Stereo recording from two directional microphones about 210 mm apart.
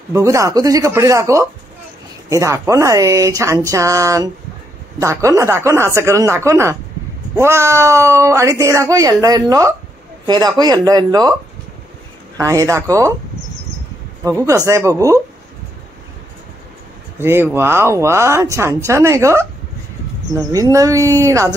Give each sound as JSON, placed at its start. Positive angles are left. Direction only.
{"t": 0.1, "sound": "speech", "side_deg": -15}
{"t": 12.4, "sound": "speech", "side_deg": -15}
{"t": 14.2, "sound": "speech", "side_deg": -15}
{"t": 17.2, "sound": "speech", "side_deg": -10}